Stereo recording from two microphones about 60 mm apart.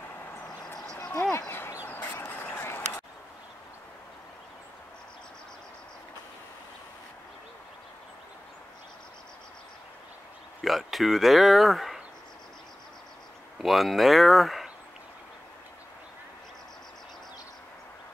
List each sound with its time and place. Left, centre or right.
1.9 s a sound: left
10.6 s speech: centre
13.6 s speech: centre